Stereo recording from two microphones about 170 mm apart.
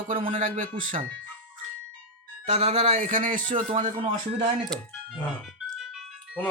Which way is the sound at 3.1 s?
50° right (ahead or behind).